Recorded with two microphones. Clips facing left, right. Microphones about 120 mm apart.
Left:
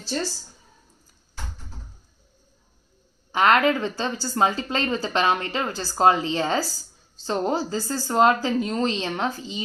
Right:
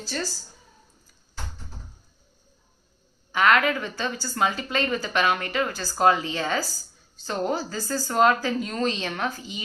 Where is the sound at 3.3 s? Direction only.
30° left (ahead or behind).